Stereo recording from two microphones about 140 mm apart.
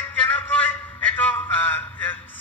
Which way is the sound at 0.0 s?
10° left (ahead or behind).